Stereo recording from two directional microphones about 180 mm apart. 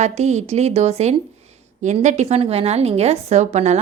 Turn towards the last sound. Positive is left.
turn(degrees=-35)  # may be behind; listen again after turning